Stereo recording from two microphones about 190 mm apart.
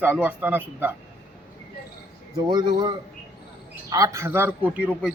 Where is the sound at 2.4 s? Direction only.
25° right (ahead or behind).